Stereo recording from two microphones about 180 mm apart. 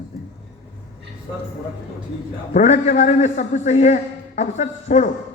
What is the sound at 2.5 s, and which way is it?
A man's voice, 40° left (ahead or behind).